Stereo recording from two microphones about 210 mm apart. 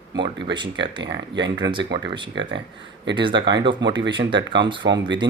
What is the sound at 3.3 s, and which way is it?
Speech, 55° right (ahead or behind).